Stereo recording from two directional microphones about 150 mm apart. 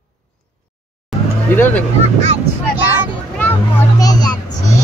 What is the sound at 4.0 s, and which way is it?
Children playing, 25° left (ahead or behind).